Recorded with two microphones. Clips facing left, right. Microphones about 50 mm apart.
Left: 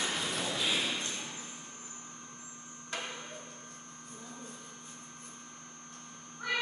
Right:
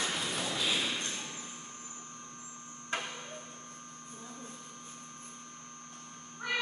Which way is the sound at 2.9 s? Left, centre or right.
Right.